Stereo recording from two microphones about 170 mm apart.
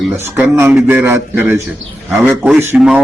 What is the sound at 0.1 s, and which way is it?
Speech, 10° right (ahead or behind).